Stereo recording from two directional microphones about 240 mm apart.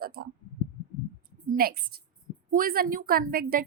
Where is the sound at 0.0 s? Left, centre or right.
Right.